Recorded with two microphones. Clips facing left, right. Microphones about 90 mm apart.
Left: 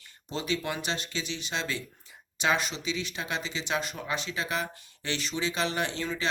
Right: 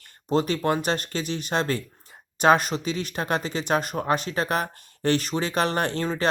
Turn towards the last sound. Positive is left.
turn(degrees=-50)  # may be behind; listen again after turning